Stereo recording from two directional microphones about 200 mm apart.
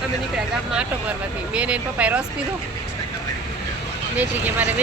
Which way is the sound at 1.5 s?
5° right (ahead or behind).